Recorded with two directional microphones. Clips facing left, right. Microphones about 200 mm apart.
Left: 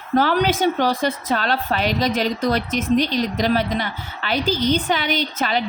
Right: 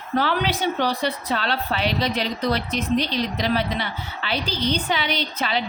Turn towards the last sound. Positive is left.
turn(degrees=45)  # may be behind; listen again after turning